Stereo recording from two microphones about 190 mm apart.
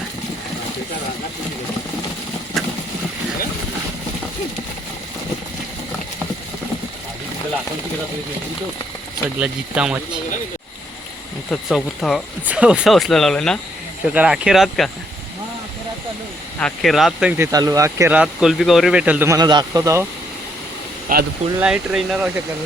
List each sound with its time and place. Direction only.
2.5 s boat: centre (ahead or behind)
9.4 s speech: 5° right (ahead or behind)
11.5 s speech: centre (ahead or behind)
16.6 s speech: 5° left (ahead or behind); by 20.1 s 15° right (ahead or behind)
21.1 s speech: 50° right (ahead or behind)
21.6 s speech: 5° right (ahead or behind)